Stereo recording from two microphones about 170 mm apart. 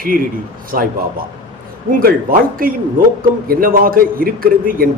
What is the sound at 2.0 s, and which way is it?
A man's voice, 55° right (ahead or behind).